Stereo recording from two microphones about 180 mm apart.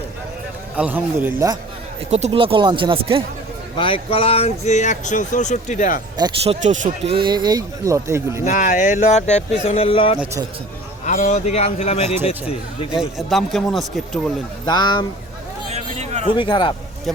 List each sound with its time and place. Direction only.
0.8 s speech: 10° right (ahead or behind)
2.0 s speech: 40° right (ahead or behind)
3.8 s speech: 30° left (ahead or behind); by 6.0 s 45° left (ahead or behind)
6.1 s speech: 25° right (ahead or behind)
8.4 s speech: 45° left (ahead or behind)
11.0 s speech: 45° left (ahead or behind)
12.9 s speech: centre (ahead or behind)
14.7 s speech: 25° left (ahead or behind)
15.7 s a sound: 40° right (ahead or behind)
16.4 s speech: 25° left (ahead or behind)